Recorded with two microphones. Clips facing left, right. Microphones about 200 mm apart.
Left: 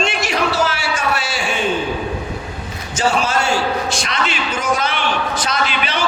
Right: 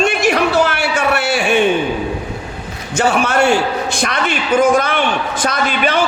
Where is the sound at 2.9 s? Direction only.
60° right (ahead or behind).